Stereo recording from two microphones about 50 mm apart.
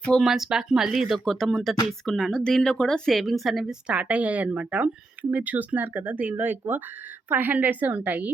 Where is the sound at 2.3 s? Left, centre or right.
Centre.